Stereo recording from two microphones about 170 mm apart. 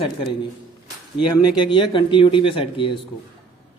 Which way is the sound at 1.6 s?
30° left (ahead or behind).